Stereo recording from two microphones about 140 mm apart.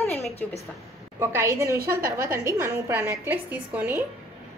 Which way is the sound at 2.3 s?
20° right (ahead or behind).